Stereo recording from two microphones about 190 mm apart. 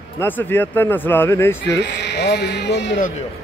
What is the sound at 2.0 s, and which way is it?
Speech, 65° left (ahead or behind).